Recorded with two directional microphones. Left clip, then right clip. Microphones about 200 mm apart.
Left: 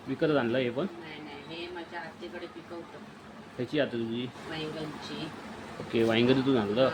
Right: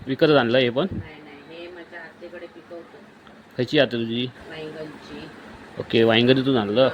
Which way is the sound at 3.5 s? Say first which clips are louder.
Right 10 dB; 40° right (ahead or behind).